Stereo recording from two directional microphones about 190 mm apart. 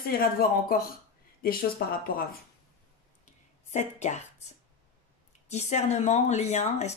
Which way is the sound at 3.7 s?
40° left (ahead or behind).